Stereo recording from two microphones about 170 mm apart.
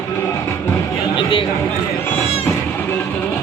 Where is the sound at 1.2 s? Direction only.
30° left (ahead or behind).